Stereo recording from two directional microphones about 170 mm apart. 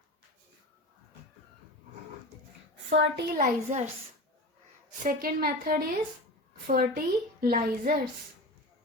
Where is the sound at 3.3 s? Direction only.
45° right (ahead or behind).